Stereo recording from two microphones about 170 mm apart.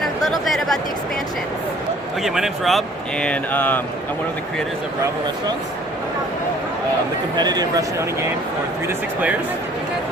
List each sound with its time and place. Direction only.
0.0 s chatter: centre (ahead or behind)
2.2 s speech: centre (ahead or behind)
7.3 s speech: 25° right (ahead or behind)